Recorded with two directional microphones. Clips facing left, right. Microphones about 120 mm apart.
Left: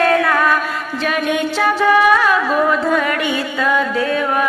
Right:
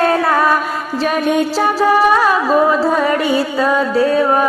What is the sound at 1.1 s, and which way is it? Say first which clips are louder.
Music: right 3 dB; 35° right (ahead or behind).